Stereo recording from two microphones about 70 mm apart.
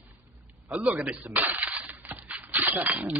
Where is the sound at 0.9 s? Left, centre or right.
Right.